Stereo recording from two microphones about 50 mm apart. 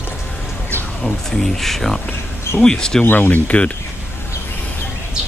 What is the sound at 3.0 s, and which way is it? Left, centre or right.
Speech, left.